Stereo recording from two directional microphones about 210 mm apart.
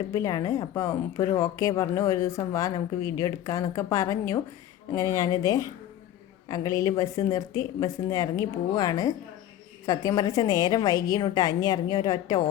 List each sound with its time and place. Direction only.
0.1 s speech: 15° left (ahead or behind)